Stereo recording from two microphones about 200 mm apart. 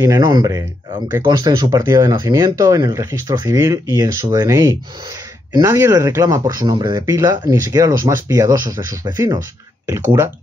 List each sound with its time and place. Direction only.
0.0 s speech: 20° right (ahead or behind)